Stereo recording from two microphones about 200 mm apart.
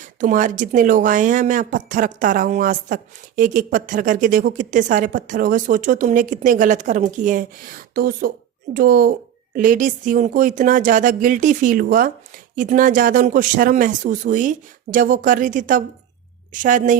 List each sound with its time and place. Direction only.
0.0 s speech: 40° right (ahead or behind)